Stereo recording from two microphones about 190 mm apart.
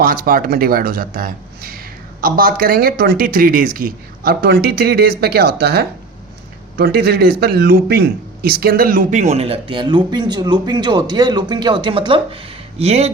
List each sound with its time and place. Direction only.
0.0 s a man's voice: 50° right (ahead or behind); by 13.1 s 35° right (ahead or behind)